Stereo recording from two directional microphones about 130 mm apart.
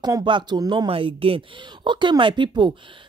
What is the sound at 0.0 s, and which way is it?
Speech, 35° right (ahead or behind).